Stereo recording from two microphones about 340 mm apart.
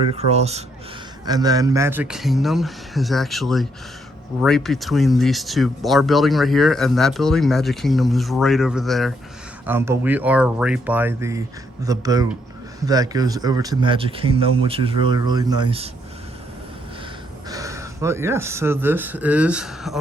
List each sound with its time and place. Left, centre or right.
0.1 s speech: centre
17.5 s speech: centre